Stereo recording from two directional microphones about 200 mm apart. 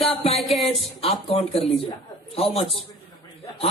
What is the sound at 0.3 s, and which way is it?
Music, 30° left (ahead or behind).